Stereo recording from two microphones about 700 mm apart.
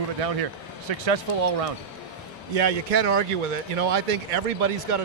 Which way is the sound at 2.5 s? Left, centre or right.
Right.